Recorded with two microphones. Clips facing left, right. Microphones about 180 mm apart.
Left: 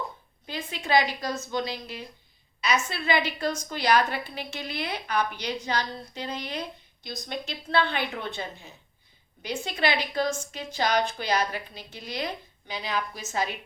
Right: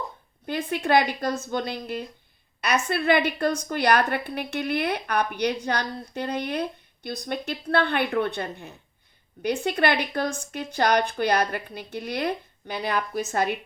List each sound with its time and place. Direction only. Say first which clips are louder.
0.4 s a woman's voice: right 7 dB; 55° right (ahead or behind)